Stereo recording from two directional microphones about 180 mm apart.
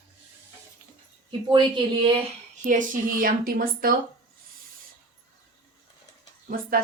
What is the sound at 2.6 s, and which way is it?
A woman's voice, 45° right (ahead or behind).